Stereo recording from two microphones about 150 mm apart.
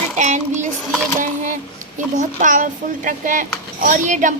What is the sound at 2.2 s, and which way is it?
Speech, 60° right (ahead or behind).